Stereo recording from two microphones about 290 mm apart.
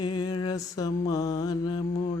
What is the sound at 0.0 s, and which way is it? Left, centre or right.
Mantra, centre.